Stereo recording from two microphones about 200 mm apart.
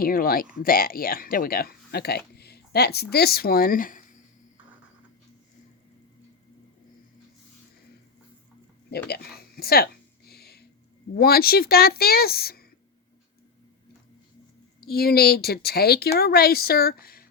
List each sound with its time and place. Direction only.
0.0 s speech: 45° left (ahead or behind)
9.0 s a sound: 50° left (ahead or behind)
11.1 s speech: 50° left (ahead or behind)
14.8 s speech: 50° left (ahead or behind)